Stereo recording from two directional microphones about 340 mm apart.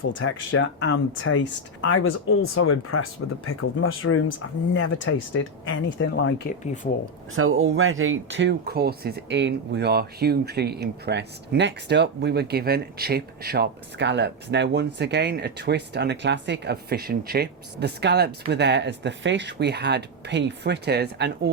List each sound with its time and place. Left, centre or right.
0.1 s speech: left
7.3 s speech: right